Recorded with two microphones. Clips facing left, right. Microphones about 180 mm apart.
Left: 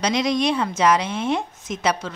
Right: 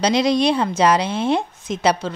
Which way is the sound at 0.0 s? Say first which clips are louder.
Right 4 dB; 30° right (ahead or behind).